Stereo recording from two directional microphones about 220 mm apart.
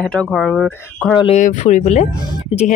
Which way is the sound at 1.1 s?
30° left (ahead or behind).